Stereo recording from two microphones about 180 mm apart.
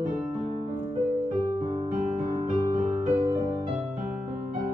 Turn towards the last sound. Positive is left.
turn(degrees=-35)  # may be behind; listen again after turning